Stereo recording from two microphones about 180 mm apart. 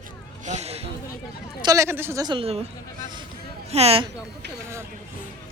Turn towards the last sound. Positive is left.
turn(degrees=-35)  # may be behind; listen again after turning